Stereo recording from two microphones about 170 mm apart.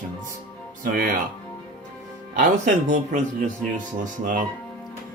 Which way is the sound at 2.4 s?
45° right (ahead or behind).